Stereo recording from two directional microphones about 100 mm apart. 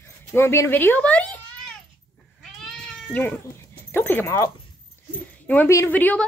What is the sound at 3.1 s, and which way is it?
A woman's voice, 20° left (ahead or behind).